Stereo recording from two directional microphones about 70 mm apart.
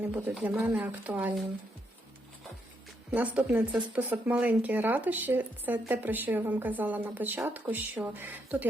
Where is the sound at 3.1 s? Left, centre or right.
Right.